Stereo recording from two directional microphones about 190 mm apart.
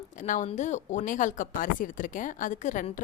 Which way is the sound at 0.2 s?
40° left (ahead or behind).